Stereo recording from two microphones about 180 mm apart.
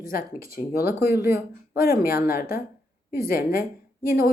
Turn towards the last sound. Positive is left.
turn(degrees=55)  # may be behind; listen again after turning